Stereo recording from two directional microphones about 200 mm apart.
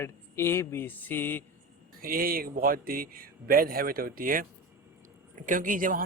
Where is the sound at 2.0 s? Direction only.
45° right (ahead or behind).